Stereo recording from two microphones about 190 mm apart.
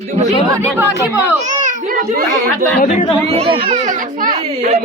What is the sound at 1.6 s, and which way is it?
A child's voice, 50° right (ahead or behind).